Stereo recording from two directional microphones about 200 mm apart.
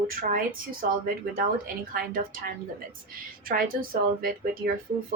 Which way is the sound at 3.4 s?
45° right (ahead or behind).